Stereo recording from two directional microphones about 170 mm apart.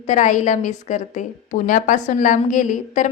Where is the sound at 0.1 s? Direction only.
45° left (ahead or behind).